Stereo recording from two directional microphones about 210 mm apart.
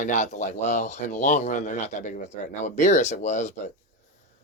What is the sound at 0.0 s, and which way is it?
Speech, 35° left (ahead or behind).